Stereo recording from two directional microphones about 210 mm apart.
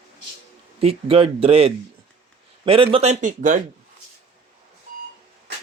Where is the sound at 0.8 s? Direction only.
25° right (ahead or behind).